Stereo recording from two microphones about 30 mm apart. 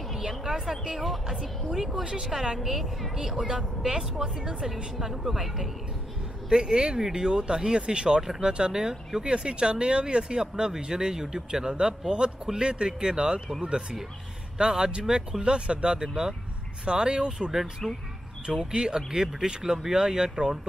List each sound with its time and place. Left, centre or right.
0.7 s a woman's voice: centre
1.7 s a woman's voice: centre
2.2 s a woman's voice: centre
5.1 s a woman's voice: centre
6.5 s a woman's voice: right
17.4 s a woman's voice: centre
18.7 s a woman's voice: right